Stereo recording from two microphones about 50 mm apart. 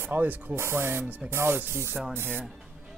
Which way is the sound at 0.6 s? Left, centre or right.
Right.